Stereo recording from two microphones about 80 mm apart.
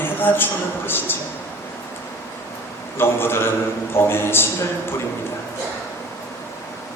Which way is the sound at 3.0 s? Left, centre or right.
Left.